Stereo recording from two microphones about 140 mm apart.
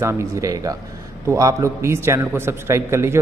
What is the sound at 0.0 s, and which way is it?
A man's voice, 20° right (ahead or behind).